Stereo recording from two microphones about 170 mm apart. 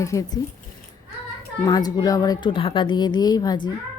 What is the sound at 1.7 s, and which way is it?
Speech, 25° left (ahead or behind).